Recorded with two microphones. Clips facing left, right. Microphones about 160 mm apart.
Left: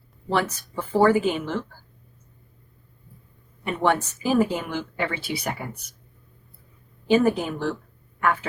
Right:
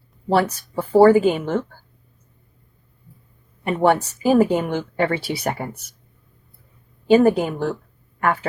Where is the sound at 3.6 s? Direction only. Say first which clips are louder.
Right 5 dB; 40° right (ahead or behind).